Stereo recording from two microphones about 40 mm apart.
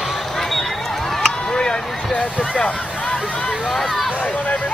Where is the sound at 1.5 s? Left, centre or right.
Left.